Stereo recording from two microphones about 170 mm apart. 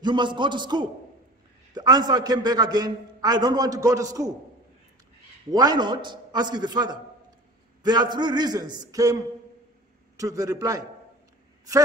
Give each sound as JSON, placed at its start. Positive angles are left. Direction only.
{"t": 0.0, "sound": "a man's voice", "side_deg": -25}
{"t": 5.5, "sound": "a man's voice", "side_deg": -25}